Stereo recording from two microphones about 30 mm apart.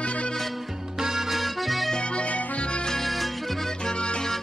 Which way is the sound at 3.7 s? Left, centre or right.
Left.